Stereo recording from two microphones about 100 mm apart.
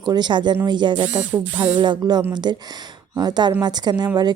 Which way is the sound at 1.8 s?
50° right (ahead or behind).